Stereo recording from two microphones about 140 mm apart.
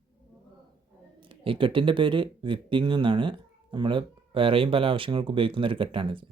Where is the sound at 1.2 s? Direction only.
40° right (ahead or behind).